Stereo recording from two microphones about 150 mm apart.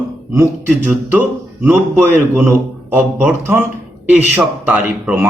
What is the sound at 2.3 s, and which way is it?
Speech, 15° right (ahead or behind).